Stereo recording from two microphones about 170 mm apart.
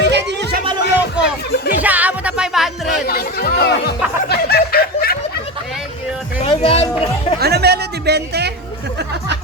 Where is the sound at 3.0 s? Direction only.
65° left (ahead or behind).